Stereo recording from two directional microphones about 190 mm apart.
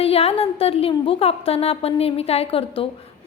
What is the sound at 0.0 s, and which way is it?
A woman's voice, 30° left (ahead or behind).